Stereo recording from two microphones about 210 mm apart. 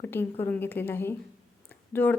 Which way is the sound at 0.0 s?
10° left (ahead or behind).